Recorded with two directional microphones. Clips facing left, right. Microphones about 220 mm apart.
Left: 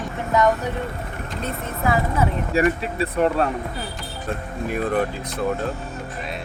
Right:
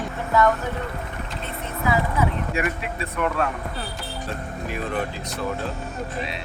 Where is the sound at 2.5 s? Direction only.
35° left (ahead or behind).